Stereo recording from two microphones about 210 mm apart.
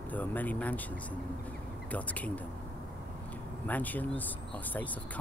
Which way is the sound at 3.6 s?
10° left (ahead or behind).